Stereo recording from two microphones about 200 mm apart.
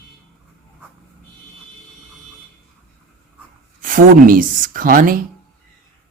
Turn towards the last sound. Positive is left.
turn(degrees=-45)  # may be behind; listen again after turning